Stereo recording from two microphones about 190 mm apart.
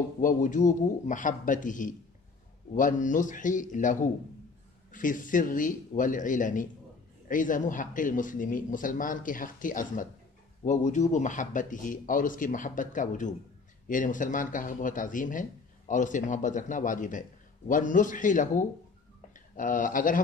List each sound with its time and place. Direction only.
0.2 s speech: 45° left (ahead or behind)